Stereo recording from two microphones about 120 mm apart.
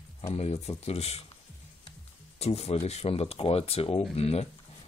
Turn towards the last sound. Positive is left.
turn(degrees=60)  # may be behind; listen again after turning